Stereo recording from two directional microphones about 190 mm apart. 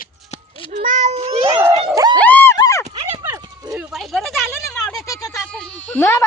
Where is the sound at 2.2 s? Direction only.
10° left (ahead or behind).